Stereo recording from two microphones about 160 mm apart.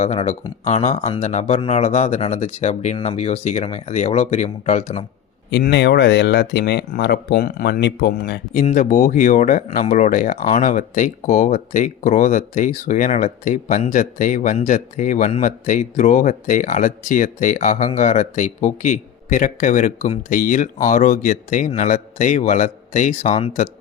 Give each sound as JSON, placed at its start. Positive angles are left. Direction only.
{"t": 0.0, "sound": "speech", "side_deg": 40}
{"t": 5.5, "sound": "speech", "side_deg": 90}
{"t": 8.6, "sound": "speech", "side_deg": 50}